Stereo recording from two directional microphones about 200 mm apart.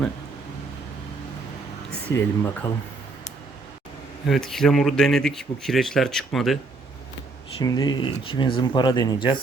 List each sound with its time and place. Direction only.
2.0 s speech: 10° left (ahead or behind)
4.3 s speech: centre (ahead or behind)
7.6 s speech: 20° left (ahead or behind)